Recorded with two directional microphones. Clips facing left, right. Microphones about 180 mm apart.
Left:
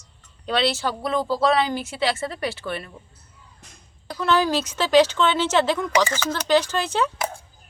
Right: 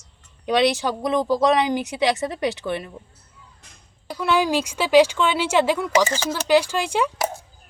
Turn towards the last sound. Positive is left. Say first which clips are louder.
# right 1 dB
turn(degrees=-10)  # may be behind; listen again after turning